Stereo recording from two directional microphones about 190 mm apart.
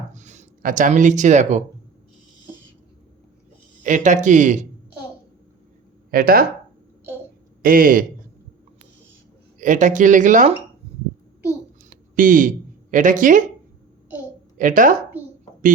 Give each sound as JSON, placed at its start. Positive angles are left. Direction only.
{"t": 0.1, "sound": "speech", "side_deg": -40}
{"t": 3.8, "sound": "speech", "side_deg": -40}
{"t": 6.1, "sound": "speech", "side_deg": -50}
{"t": 7.6, "sound": "a man's voice", "side_deg": -45}
{"t": 9.6, "sound": "speech", "side_deg": -40}
{"t": 11.9, "sound": "a sound", "side_deg": -45}
{"t": 14.6, "sound": "a man's voice", "side_deg": -45}